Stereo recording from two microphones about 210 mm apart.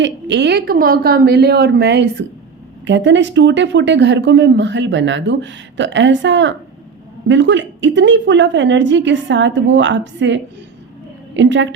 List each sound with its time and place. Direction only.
0.0 s a woman's voice: 55° right (ahead or behind)